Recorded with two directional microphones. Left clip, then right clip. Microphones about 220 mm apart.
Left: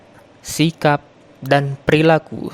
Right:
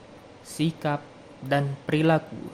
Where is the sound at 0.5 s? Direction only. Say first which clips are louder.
Left 12 dB; 35° left (ahead or behind).